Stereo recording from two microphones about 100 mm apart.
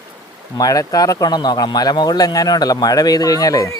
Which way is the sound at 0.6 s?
40° left (ahead or behind).